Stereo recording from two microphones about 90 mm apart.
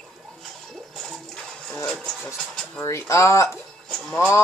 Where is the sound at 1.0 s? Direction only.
10° left (ahead or behind).